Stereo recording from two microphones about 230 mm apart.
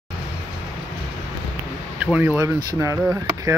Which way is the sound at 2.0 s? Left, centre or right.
Centre.